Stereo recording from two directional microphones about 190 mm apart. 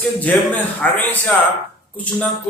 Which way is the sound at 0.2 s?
10° left (ahead or behind).